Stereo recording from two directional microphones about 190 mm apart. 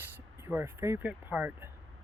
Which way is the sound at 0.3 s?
10° right (ahead or behind).